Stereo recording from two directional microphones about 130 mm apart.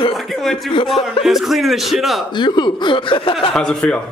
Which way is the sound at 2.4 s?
35° left (ahead or behind).